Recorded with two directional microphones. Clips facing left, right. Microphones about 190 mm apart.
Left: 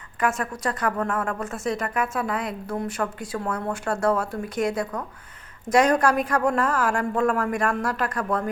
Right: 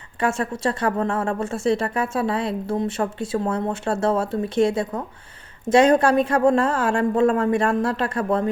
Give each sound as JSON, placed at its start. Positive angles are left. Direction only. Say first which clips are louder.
{"t": 0.2, "sound": "a woman's voice", "louder": "right 3 dB", "side_deg": -30}